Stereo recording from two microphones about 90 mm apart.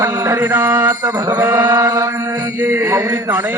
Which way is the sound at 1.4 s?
25° right (ahead or behind).